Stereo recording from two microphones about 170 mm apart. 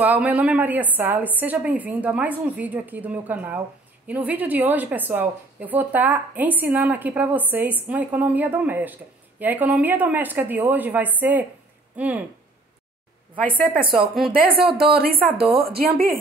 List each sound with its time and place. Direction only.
0.0 s a woman's voice: 10° right (ahead or behind)
14.3 s speech: 60° right (ahead or behind)
15.3 s a woman's voice: 35° right (ahead or behind)
15.7 s speech: 60° right (ahead or behind)